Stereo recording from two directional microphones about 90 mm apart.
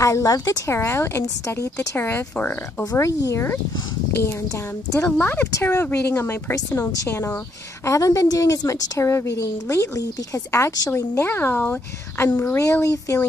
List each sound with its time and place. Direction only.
0.0 s a woman's voice: 35° left (ahead or behind)
2.8 s a woman's voice: 40° left (ahead or behind); by 12.6 s 20° left (ahead or behind)
12.6 s a woman's voice: 35° left (ahead or behind)